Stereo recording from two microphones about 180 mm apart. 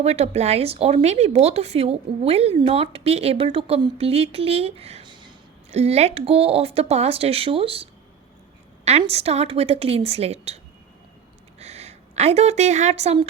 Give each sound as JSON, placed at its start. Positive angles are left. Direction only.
{"t": 0.0, "sound": "speech", "side_deg": -35}
{"t": 5.7, "sound": "speech", "side_deg": -35}
{"t": 11.6, "sound": "a woman's voice", "side_deg": -35}